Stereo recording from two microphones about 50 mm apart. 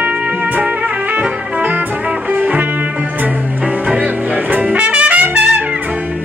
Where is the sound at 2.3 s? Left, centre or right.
Right.